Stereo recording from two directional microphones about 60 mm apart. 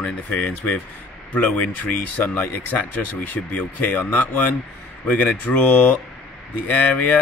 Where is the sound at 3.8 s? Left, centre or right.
Left.